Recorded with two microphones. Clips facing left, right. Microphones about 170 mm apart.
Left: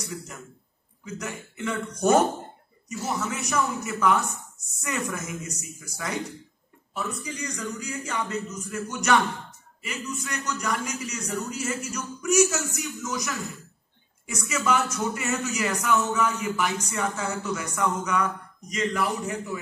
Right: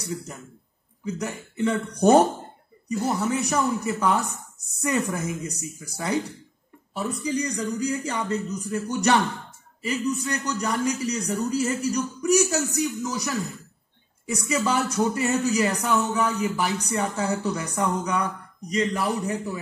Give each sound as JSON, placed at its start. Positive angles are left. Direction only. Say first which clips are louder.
{"t": 1.0, "sound": "a man's voice", "louder": "right 5 dB", "side_deg": -35}
{"t": 2.9, "sound": "speech", "louder": "right 5 dB", "side_deg": -55}
{"t": 3.2, "sound": "a man's voice", "louder": "right 3 dB", "side_deg": -35}
{"t": 14.5, "sound": "a man's voice", "louder": "right 1 dB", "side_deg": -35}